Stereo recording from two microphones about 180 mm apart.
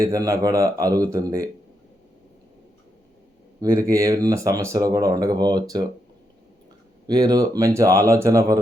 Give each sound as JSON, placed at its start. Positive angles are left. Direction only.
{"t": 0.0, "sound": "speech", "side_deg": -20}
{"t": 3.6, "sound": "speech", "side_deg": -20}
{"t": 7.1, "sound": "speech", "side_deg": -20}